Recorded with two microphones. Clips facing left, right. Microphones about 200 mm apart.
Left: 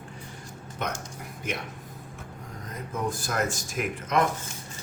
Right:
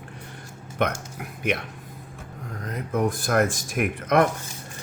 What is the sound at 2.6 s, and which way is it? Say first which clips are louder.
Speech: right 7 dB; 65° right (ahead or behind).